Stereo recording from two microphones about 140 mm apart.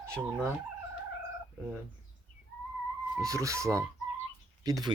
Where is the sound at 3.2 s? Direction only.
20° right (ahead or behind).